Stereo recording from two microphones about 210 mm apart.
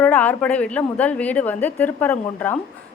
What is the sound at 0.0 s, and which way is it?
A woman's voice, 10° left (ahead or behind).